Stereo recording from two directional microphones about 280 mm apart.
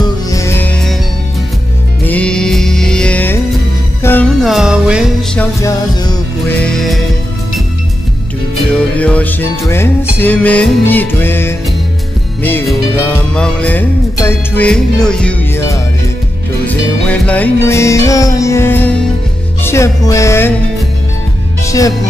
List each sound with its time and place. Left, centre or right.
0.0 s music: centre
2.0 s music: centre
8.7 s music: centre
21.6 s speech: centre